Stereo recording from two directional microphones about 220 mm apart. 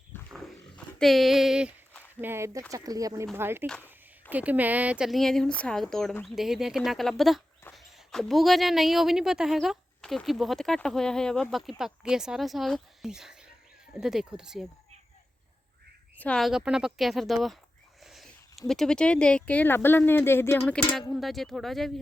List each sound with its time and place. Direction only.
0.3 s roaring cats: centre (ahead or behind)
0.9 s speech: centre (ahead or behind)
16.1 s speech: 5° left (ahead or behind)
18.0 s a sound: centre (ahead or behind)
18.7 s speech: centre (ahead or behind)